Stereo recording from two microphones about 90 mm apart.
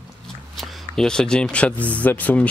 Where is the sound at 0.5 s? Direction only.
Centre (ahead or behind).